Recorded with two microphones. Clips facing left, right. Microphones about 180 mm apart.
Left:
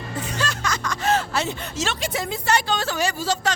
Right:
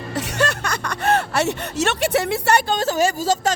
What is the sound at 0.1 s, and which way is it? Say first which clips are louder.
Speech: right 6 dB; 80° right.